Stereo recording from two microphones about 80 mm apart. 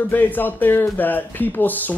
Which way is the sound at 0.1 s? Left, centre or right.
Left.